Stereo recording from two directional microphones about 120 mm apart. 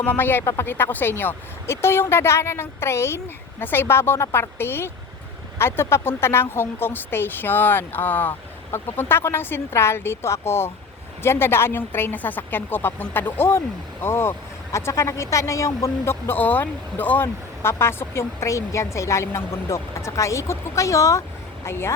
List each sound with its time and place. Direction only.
0.0 s a woman's voice: 15° left (ahead or behind)